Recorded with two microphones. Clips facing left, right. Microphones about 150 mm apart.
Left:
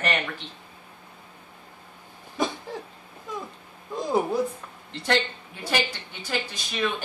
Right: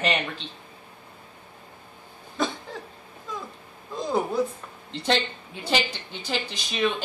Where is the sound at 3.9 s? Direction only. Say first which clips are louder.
Left 2 dB; 15° left (ahead or behind).